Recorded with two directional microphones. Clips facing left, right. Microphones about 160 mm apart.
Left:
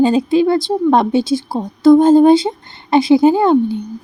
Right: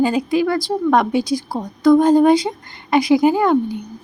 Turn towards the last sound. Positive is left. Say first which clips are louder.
# left 4 dB
turn(degrees=25)  # may be behind; listen again after turning